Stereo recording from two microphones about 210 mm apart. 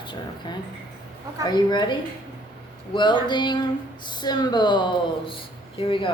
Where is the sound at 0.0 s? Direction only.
20° left (ahead or behind).